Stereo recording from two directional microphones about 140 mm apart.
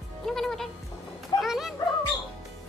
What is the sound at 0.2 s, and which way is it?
Music, 5° left (ahead or behind).